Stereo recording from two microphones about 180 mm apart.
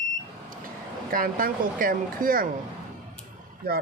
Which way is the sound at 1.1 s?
50° right (ahead or behind).